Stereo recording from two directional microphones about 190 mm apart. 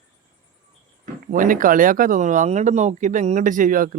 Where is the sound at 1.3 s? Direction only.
45° right (ahead or behind).